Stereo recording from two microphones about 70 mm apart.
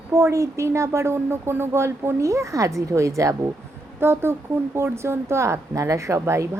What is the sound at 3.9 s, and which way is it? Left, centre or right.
Speech, right.